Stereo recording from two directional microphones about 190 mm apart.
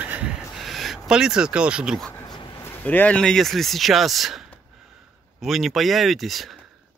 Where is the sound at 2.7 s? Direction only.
10° left (ahead or behind).